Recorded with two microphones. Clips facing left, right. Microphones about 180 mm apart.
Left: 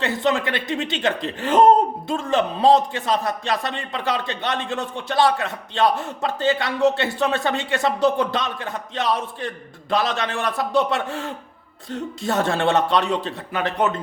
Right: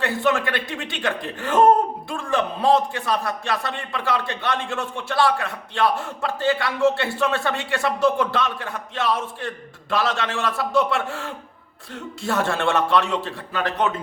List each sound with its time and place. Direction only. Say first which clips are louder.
0.0 s a man's voice: even; 20° left (ahead or behind)